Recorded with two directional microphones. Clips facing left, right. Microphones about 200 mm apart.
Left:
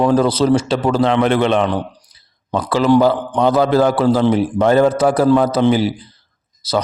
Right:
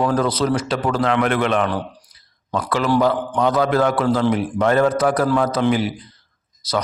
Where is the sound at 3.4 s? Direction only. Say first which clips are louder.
Left 4 dB; 30° left (ahead or behind).